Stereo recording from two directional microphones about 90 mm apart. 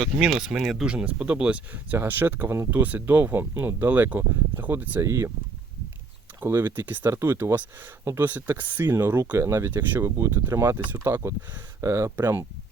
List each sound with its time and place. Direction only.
0.0 s speech: 5° right (ahead or behind); by 5.3 s 30° right (ahead or behind)
6.4 s speech: 25° right (ahead or behind)